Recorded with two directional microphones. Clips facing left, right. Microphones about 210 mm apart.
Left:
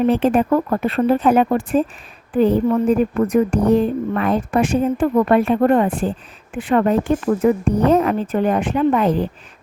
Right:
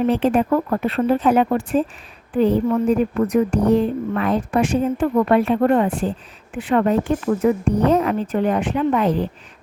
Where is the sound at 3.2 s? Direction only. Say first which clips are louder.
Left 1 dB; 50° left (ahead or behind).